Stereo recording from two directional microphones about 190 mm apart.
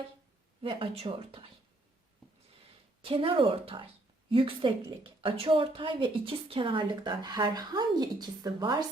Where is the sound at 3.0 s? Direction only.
30° right (ahead or behind).